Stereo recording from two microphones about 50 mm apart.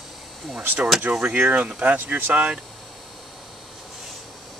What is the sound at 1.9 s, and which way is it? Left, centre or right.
Speech, right.